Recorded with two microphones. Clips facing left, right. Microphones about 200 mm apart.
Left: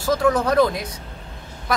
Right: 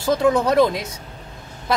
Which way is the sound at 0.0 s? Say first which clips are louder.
Right 2 dB; 25° right (ahead or behind).